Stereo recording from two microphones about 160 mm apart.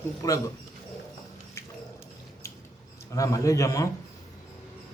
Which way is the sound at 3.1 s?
20° left (ahead or behind).